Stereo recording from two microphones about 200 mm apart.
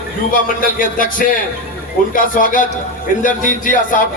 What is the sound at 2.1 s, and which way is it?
Speech, 40° left (ahead or behind).